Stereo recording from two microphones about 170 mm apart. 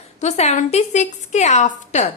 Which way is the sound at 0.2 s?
40° left (ahead or behind).